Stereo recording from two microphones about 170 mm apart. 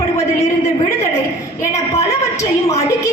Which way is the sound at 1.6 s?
15° left (ahead or behind).